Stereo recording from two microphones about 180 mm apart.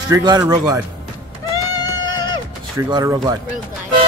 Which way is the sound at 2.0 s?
90° right.